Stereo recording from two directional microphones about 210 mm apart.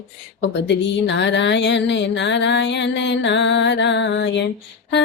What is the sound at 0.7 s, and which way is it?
Music, 60° left (ahead or behind).